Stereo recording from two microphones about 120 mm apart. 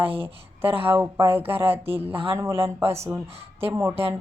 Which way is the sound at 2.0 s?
50° right (ahead or behind).